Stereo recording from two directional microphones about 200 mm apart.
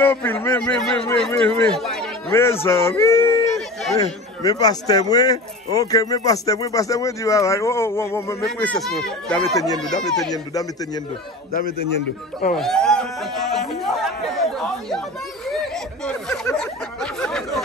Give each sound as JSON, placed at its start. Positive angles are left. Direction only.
{"t": 0.0, "sound": "a man's voice", "side_deg": 10}
{"t": 3.0, "sound": "a sound", "side_deg": 15}
{"t": 4.4, "sound": "a man's voice", "side_deg": 20}
{"t": 10.3, "sound": "a man's voice", "side_deg": 20}
{"t": 12.5, "sound": "chatter", "side_deg": 0}
{"t": 15.4, "sound": "a sound", "side_deg": 0}